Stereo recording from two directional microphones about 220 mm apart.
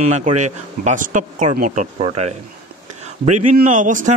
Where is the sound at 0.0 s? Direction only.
30° right (ahead or behind).